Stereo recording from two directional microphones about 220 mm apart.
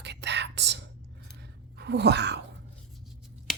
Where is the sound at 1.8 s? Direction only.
50° right (ahead or behind).